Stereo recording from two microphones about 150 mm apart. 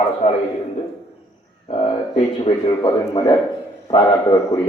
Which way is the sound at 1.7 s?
35° left (ahead or behind).